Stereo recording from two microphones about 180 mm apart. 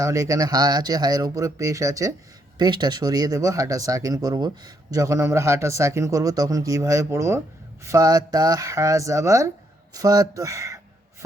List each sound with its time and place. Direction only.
0.0 s speech: 20° right (ahead or behind)